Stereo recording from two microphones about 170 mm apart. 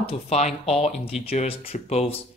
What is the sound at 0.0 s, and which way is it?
Speech, 40° left (ahead or behind).